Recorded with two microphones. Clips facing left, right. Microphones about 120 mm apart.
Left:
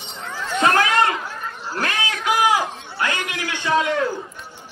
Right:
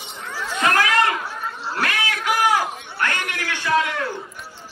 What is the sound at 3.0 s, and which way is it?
A man's voice, 20° left (ahead or behind).